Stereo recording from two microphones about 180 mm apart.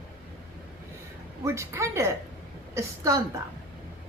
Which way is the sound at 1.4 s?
15° right (ahead or behind).